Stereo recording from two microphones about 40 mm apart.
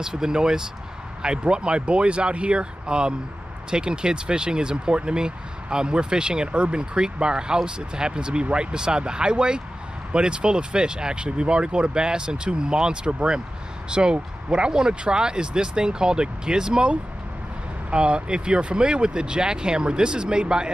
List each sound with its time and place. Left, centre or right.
0.0 s speech: centre
17.9 s speech: right